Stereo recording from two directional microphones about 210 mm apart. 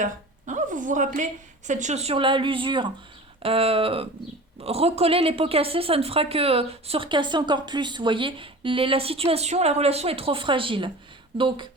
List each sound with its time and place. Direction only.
0.0 s a woman's voice: 35° right (ahead or behind)